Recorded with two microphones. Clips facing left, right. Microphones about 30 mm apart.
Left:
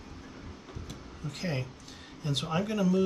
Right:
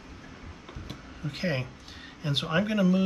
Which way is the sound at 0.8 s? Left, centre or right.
Right.